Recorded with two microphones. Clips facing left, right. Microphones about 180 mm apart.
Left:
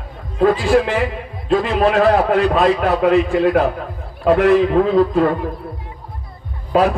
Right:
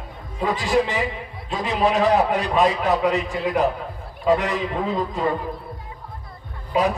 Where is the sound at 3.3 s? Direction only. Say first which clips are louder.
Left 7 dB; 80° left.